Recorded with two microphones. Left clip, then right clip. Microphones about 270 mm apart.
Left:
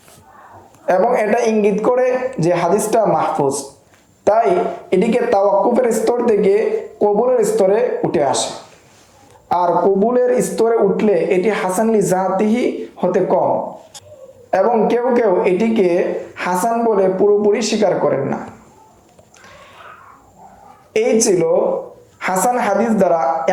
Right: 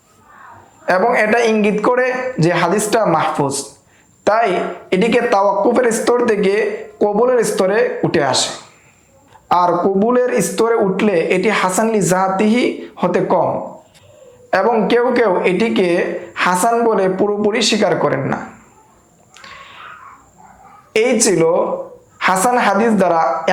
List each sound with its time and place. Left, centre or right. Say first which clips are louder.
0.9 s a man's voice: right 1 dB; right
9.5 s a man's voice: right 1 dB; right
14.5 s a man's voice: right 1 dB; right
20.9 s a man's voice: even; right